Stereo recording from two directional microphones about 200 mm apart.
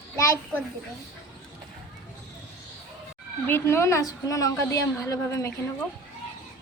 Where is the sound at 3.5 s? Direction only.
10° left (ahead or behind).